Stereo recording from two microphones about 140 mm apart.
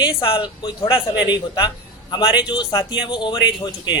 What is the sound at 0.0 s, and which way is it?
A man's voice, 35° left (ahead or behind).